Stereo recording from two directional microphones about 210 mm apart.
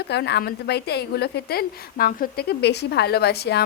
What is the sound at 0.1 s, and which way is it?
A woman's voice, 55° left (ahead or behind).